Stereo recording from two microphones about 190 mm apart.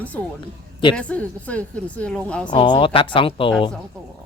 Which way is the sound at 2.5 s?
25° left (ahead or behind).